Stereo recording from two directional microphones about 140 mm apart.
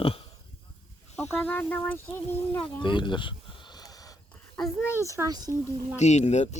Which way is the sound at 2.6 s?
35° left (ahead or behind).